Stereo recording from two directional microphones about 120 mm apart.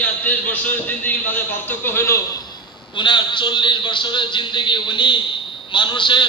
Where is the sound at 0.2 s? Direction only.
10° left (ahead or behind).